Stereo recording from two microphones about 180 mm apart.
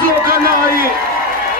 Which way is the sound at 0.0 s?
55° right (ahead or behind).